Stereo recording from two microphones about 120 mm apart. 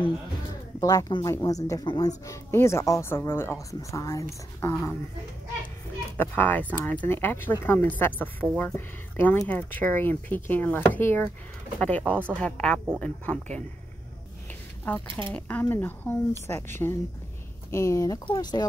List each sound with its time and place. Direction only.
0.5 s music: 30° left (ahead or behind)
1.2 s speech: 30° left (ahead or behind)
6.1 s speech: 15° left (ahead or behind)
15.0 s speech: 45° right (ahead or behind)
15.3 s speech: 15° left (ahead or behind)
18.2 s speech: 40° left (ahead or behind)